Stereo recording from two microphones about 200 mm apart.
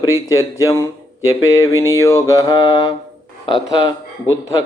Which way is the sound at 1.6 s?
15° left (ahead or behind).